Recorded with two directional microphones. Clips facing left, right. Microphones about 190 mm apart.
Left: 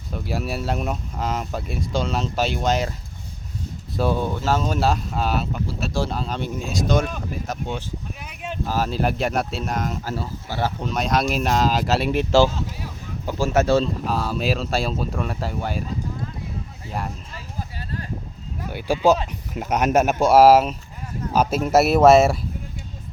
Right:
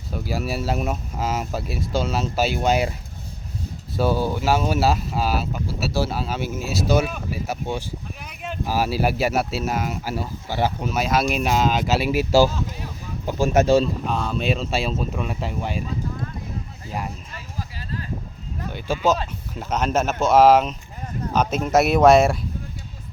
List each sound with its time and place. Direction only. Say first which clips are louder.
0.1 s speech: right 1 dB; centre (ahead or behind)
3.9 s speech: right 1 dB; centre (ahead or behind)
10.9 s speech: left 1 dB; 5° right (ahead or behind)
13.8 s speech: even; 5° left (ahead or behind)
18.6 s a man's voice: left 3 dB; 10° left (ahead or behind)